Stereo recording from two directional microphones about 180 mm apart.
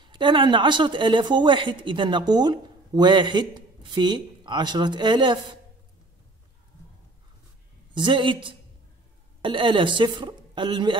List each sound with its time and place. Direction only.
0.0 s a woman's voice: 25° right (ahead or behind)
7.9 s a woman's voice: 25° right (ahead or behind)